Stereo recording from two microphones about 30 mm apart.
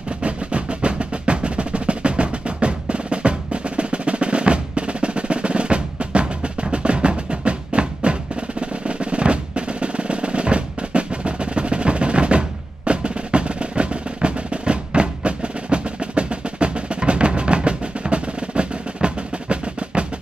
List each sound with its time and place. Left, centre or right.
0.2 s percussion: right